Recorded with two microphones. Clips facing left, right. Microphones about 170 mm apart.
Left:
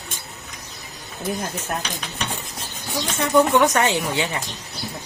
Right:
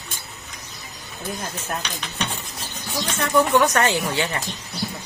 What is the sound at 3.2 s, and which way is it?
Speech, 20° left (ahead or behind).